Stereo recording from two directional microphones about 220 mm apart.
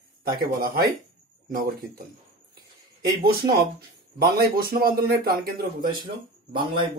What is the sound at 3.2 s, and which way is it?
A man's voice, 45° right (ahead or behind).